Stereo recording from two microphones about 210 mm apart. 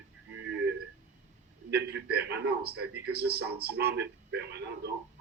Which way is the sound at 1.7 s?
50° right (ahead or behind).